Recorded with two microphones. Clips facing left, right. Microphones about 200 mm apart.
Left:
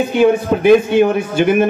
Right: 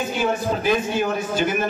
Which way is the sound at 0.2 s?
60° left (ahead or behind).